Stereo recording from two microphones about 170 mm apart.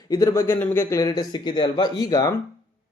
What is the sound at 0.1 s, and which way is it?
Speech, 20° left (ahead or behind).